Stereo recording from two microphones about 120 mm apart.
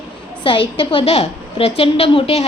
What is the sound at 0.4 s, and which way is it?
A woman's voice, 45° left (ahead or behind).